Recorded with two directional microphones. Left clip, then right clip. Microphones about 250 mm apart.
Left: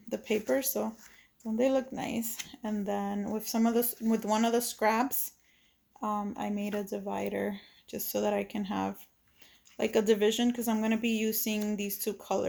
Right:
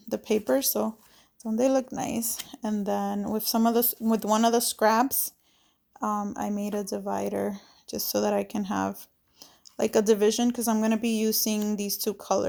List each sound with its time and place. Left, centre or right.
0.1 s speech: right